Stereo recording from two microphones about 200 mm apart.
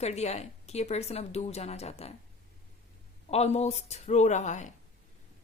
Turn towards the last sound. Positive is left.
turn(degrees=35)  # may be behind; listen again after turning